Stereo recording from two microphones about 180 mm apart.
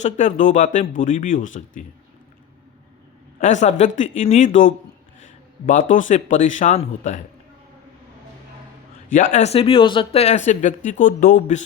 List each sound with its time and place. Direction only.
0.0 s a man's voice: 45° left (ahead or behind)
3.4 s a man's voice: 40° left (ahead or behind)
9.1 s speech: 45° left (ahead or behind)